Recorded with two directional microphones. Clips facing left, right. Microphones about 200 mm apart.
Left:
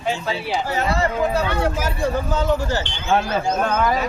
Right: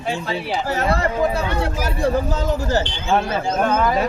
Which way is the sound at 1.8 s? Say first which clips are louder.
Right 2 dB; 35° right (ahead or behind).